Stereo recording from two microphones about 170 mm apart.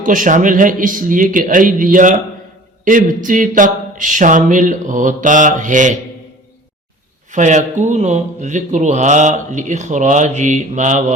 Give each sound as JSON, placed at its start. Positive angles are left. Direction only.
{"t": 0.0, "sound": "a man's voice", "side_deg": -50}
{"t": 7.3, "sound": "a man's voice", "side_deg": -45}